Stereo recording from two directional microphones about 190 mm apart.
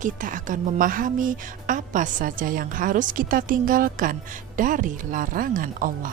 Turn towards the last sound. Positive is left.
turn(degrees=-45)  # may be behind; listen again after turning